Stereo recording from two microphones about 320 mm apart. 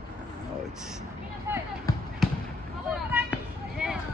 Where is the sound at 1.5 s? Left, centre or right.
Centre.